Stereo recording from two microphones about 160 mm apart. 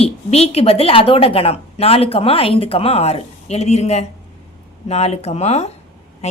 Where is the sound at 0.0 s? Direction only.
40° left (ahead or behind).